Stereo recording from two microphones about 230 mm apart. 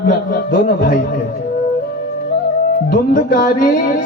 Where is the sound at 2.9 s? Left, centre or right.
Left.